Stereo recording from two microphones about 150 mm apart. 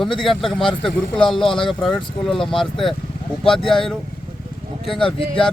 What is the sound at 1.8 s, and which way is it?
Speech, centre (ahead or behind).